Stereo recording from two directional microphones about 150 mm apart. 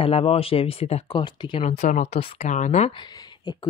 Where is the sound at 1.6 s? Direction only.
50° left (ahead or behind).